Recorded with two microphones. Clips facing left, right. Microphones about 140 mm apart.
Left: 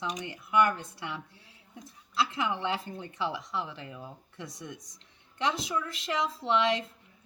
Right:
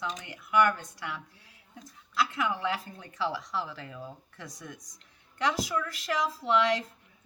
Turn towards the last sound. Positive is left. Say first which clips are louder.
# right 1 dB
turn(degrees=25)  # may be behind; listen again after turning